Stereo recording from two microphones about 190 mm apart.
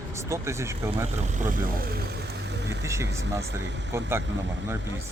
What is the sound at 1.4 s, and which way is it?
Speech, 50° right (ahead or behind).